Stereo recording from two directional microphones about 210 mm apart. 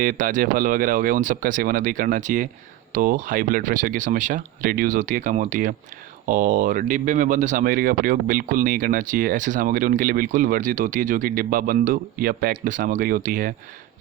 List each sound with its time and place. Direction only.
0.0 s speech: 40° right (ahead or behind)